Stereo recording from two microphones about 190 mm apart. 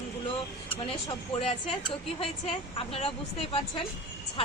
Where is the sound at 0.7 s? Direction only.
30° left (ahead or behind).